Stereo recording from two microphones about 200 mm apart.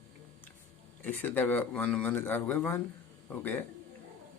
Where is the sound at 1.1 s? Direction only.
10° left (ahead or behind).